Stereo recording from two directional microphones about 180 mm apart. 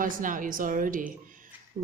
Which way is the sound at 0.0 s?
50° right (ahead or behind).